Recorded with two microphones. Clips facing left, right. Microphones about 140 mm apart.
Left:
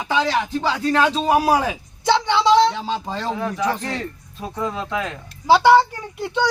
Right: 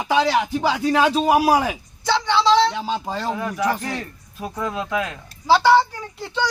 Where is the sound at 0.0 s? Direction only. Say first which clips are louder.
Right 2 dB; 15° right (ahead or behind).